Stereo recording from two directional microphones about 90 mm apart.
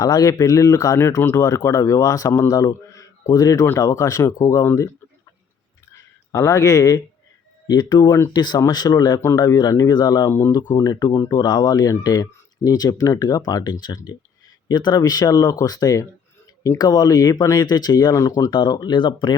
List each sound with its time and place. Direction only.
0.0 s speech: 45° left (ahead or behind)
5.9 s a sound: 35° left (ahead or behind)
7.7 s speech: 50° left (ahead or behind)
10.2 s speech: 35° left (ahead or behind)
11.1 s speech: 30° left (ahead or behind)
11.3 s speech: 50° left (ahead or behind)
18.5 s speech: 55° left (ahead or behind)